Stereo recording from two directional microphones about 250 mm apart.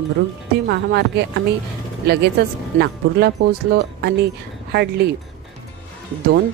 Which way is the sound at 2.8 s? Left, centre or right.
Right.